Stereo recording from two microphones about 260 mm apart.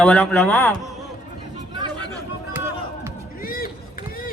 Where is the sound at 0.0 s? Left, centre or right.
Centre.